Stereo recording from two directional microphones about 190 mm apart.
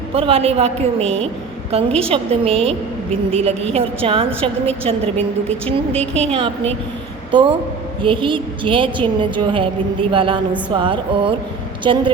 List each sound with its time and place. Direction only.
0.1 s a woman's voice: 30° right (ahead or behind)
5.9 s a woman's voice: 5° left (ahead or behind)
6.3 s a woman's voice: 30° right (ahead or behind)
8.0 s a woman's voice: 25° right (ahead or behind)